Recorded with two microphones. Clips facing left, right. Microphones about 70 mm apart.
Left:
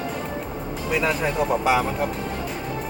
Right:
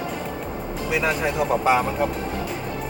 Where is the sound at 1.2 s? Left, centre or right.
Centre.